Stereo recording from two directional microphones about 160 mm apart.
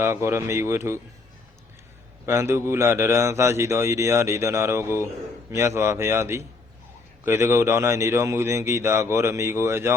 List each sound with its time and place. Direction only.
0.0 s a man's voice: 15° right (ahead or behind)
2.2 s a man's voice: 15° right (ahead or behind)